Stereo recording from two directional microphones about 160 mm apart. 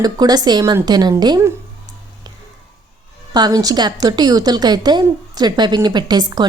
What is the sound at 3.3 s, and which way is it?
A woman's voice, 25° right (ahead or behind).